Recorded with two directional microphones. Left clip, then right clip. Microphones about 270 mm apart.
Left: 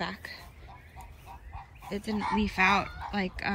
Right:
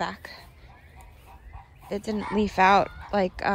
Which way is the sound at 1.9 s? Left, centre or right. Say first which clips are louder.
Right 2 dB; centre.